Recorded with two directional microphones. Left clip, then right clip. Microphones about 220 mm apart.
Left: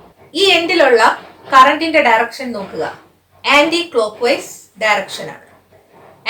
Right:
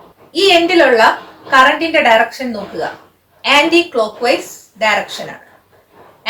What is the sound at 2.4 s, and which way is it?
A woman's voice, 15° left (ahead or behind).